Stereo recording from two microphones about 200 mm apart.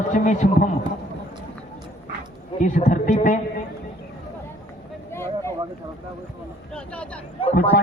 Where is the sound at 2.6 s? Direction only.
40° left (ahead or behind).